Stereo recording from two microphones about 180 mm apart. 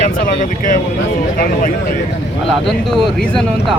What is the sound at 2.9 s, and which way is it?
Speech, 5° left (ahead or behind).